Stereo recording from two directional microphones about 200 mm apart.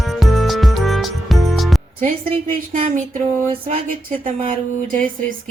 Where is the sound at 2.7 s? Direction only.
40° right (ahead or behind).